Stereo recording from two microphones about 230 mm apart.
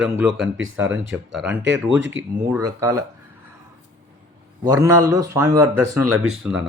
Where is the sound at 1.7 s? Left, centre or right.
Right.